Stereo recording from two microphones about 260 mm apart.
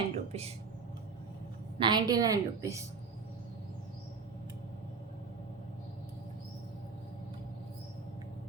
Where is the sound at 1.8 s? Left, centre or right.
Centre.